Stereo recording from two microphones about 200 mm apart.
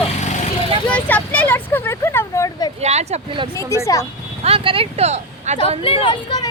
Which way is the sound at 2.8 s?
35° right (ahead or behind).